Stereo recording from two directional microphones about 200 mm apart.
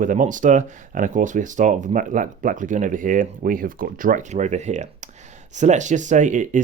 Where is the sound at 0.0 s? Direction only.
40° right (ahead or behind).